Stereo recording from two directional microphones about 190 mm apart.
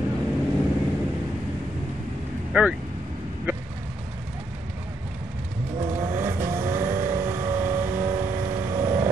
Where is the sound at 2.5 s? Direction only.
5° right (ahead or behind).